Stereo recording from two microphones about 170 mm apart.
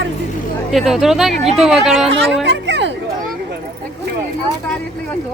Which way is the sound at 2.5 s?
90° right.